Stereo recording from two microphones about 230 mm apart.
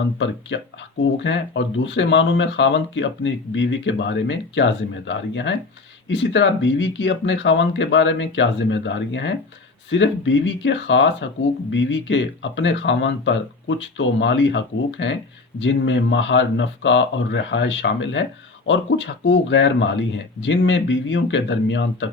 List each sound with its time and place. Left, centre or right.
0.5 s speech: left